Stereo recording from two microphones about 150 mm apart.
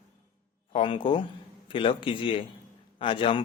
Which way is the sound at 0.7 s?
35° left (ahead or behind).